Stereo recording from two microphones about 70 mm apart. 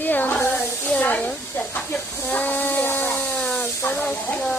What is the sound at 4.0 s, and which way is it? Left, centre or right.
Speech, left.